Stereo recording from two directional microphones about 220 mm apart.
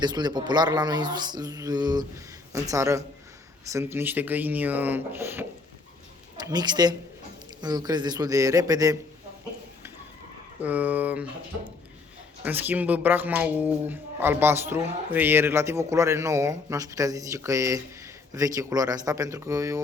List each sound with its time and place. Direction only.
0.0 s speech: 20° right (ahead or behind)
10.6 s speech: 5° right (ahead or behind)
12.5 s speech: 10° right (ahead or behind)